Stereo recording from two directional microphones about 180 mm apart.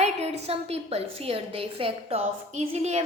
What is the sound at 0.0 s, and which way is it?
A woman's voice, 35° right (ahead or behind).